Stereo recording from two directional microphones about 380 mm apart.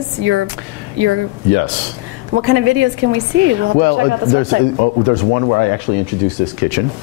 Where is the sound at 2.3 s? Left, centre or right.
Right.